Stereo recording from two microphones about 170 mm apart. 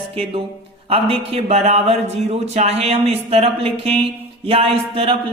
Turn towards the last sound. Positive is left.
turn(degrees=-30)  # may be behind; listen again after turning